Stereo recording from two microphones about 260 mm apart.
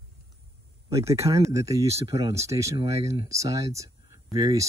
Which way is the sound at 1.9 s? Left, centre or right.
Right.